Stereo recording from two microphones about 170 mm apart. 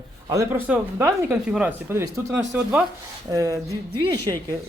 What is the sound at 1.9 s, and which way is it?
Speech, 15° right (ahead or behind).